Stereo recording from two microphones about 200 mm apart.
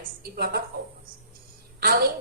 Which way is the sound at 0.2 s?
50° right (ahead or behind).